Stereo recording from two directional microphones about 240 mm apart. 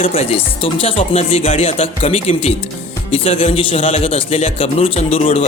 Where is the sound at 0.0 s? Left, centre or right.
Left.